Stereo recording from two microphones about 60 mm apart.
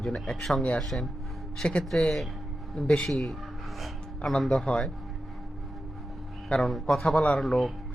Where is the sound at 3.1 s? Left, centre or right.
Centre.